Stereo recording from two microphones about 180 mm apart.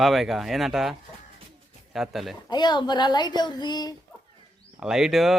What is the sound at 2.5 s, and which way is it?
Speech, 25° left (ahead or behind).